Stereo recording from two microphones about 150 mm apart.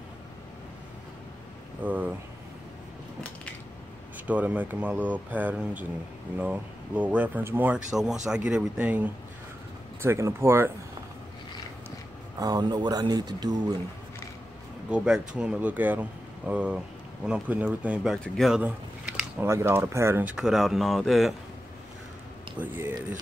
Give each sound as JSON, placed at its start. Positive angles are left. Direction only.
{"t": 1.8, "sound": "speech", "side_deg": -10}
{"t": 4.3, "sound": "speech", "side_deg": -10}
{"t": 12.4, "sound": "speech", "side_deg": -25}
{"t": 14.9, "sound": "speech", "side_deg": -5}
{"t": 18.6, "sound": "a sound", "side_deg": -10}
{"t": 19.5, "sound": "speech", "side_deg": -15}
{"t": 22.6, "sound": "speech", "side_deg": -15}